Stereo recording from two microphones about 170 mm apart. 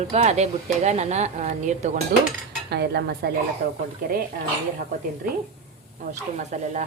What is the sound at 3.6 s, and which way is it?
Speech, 65° right (ahead or behind).